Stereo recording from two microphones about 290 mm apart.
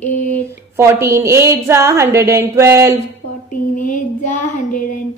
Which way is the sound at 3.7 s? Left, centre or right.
Left.